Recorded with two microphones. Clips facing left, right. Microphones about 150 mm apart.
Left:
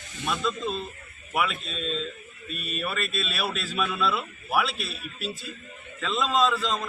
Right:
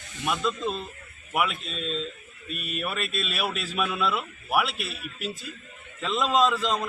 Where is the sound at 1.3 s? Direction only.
10° right (ahead or behind).